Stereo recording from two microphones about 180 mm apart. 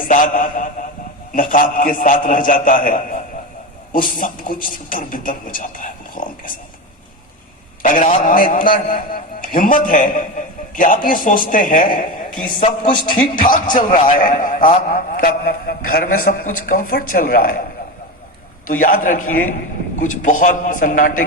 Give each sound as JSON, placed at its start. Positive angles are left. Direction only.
{"t": 0.0, "sound": "a sound", "side_deg": 50}
{"t": 1.4, "sound": "a man's voice", "side_deg": 50}
{"t": 7.8, "sound": "a man's voice", "side_deg": 45}
{"t": 18.7, "sound": "a man's voice", "side_deg": 50}